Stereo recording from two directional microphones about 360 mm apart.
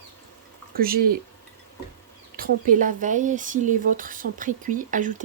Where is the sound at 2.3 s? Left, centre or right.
Right.